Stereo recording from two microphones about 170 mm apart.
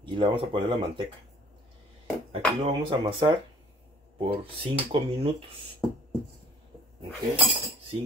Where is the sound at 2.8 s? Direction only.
25° right (ahead or behind).